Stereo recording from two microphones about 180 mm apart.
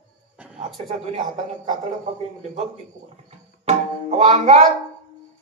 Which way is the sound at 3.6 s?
35° right (ahead or behind).